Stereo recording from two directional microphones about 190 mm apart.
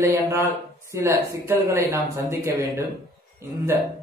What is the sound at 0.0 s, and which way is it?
Speech, 15° right (ahead or behind).